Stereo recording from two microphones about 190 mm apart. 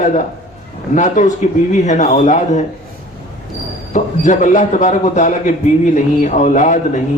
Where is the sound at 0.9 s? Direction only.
40° left (ahead or behind).